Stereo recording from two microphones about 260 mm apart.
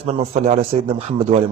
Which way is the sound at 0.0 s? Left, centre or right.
Right.